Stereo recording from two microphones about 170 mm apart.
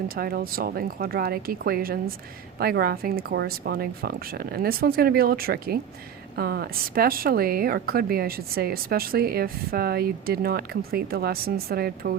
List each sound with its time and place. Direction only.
0.1 s a woman's voice: 60° right (ahead or behind)